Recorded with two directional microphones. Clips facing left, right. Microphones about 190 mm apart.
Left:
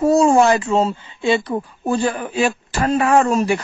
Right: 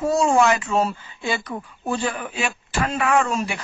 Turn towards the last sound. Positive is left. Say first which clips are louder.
# left 6 dB
turn(degrees=40)  # may be behind; listen again after turning